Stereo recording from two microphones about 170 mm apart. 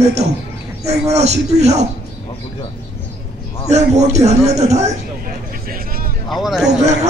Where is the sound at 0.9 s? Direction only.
40° right (ahead or behind).